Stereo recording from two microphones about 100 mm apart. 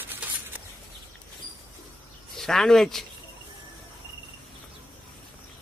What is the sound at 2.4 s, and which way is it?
Speech, 5° left (ahead or behind).